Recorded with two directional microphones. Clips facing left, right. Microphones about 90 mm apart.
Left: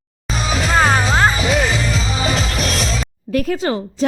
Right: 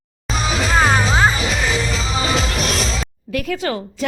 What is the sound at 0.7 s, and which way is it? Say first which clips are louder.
Music: left 1 dB; centre (ahead or behind).